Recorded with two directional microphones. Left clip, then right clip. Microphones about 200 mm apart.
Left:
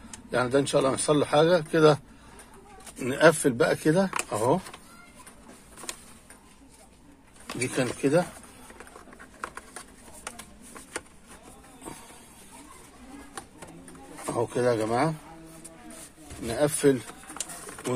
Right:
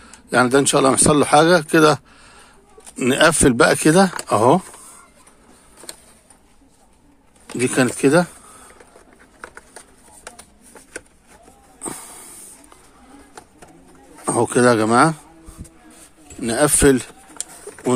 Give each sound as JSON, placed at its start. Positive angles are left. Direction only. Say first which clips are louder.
{"t": 0.3, "sound": "speech", "louder": "right 9 dB", "side_deg": -50}
{"t": 3.0, "sound": "speech", "louder": "right 6 dB", "side_deg": -55}
{"t": 7.5, "sound": "speech", "louder": "right 10 dB", "side_deg": -60}
{"t": 14.2, "sound": "speech", "louder": "right 10 dB", "side_deg": -60}
{"t": 16.4, "sound": "speech", "louder": "right 8 dB", "side_deg": -50}